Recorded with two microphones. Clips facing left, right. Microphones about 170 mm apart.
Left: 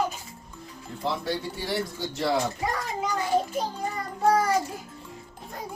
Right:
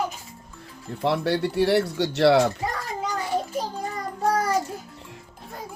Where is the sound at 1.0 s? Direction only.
70° right (ahead or behind).